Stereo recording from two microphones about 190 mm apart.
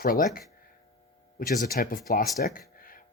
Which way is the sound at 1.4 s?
50° left (ahead or behind).